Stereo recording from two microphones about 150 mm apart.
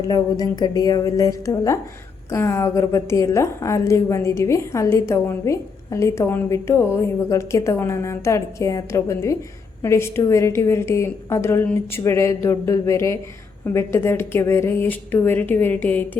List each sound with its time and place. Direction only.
0.0 s a woman's voice: 25° left (ahead or behind)